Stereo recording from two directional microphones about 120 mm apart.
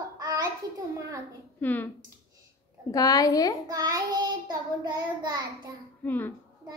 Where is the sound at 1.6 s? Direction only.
15° left (ahead or behind).